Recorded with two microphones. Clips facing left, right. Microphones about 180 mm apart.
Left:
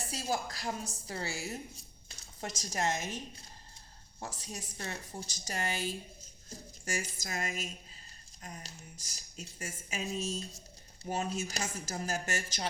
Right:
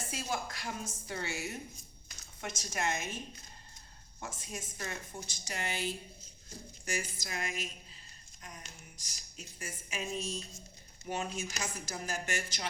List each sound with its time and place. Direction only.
0.1 s a woman's voice: 35° left (ahead or behind)
4.2 s a woman's voice: 35° left (ahead or behind)